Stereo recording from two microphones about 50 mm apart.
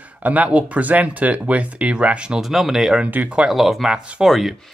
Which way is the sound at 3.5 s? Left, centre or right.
Centre.